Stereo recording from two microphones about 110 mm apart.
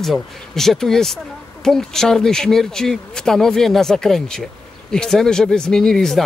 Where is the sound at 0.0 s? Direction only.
Centre (ahead or behind).